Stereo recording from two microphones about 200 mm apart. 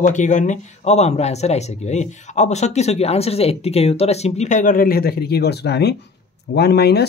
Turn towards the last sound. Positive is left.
turn(degrees=55)  # may be behind; listen again after turning